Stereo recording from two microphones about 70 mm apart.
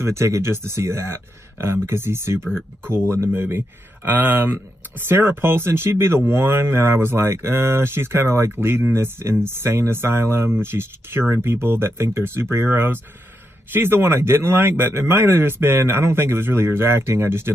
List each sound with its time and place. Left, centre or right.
0.0 s speech: right